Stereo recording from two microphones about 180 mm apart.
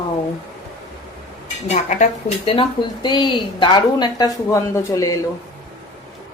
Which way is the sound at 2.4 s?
30° left (ahead or behind).